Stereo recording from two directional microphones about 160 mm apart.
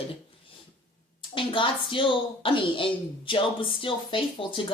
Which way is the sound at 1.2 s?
30° left (ahead or behind).